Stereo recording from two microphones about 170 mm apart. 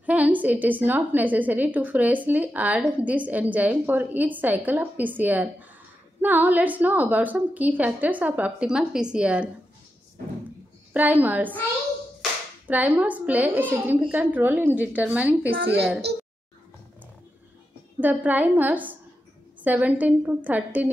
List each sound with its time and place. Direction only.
0.0 s a woman's voice: 10° right (ahead or behind)
10.9 s a woman's voice: 10° right (ahead or behind)
15.5 s a child's voice: 75° right (ahead or behind)
18.0 s a woman's voice: 10° right (ahead or behind)